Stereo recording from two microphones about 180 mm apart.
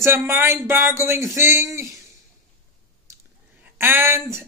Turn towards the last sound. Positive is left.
turn(degrees=-15)  # may be behind; listen again after turning